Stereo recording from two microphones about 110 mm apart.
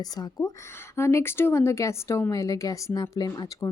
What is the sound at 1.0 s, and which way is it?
A woman's voice, 25° left (ahead or behind).